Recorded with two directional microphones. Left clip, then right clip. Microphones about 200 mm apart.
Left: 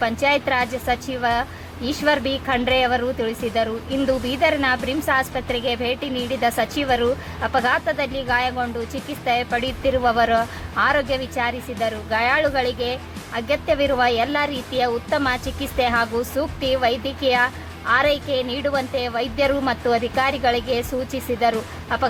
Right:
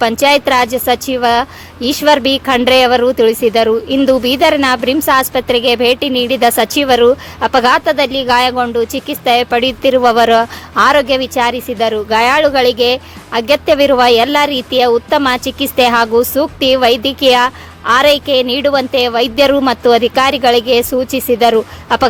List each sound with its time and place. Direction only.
0.0 s a woman's voice: 50° right (ahead or behind)